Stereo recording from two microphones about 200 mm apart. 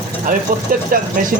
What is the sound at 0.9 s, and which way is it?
Speech, 45° right (ahead or behind).